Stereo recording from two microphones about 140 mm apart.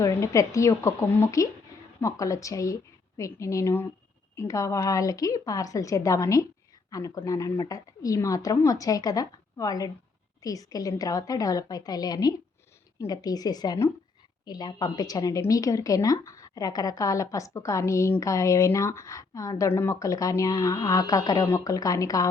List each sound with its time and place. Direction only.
0.0 s speech: 25° left (ahead or behind)